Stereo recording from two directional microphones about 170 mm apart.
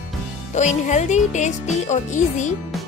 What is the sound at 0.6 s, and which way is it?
Speech, 45° left (ahead or behind).